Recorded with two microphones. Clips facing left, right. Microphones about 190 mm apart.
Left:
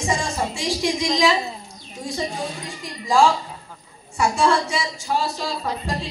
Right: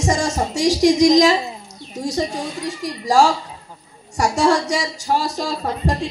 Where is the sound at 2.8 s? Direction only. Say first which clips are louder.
Right 3 dB; 40° right (ahead or behind).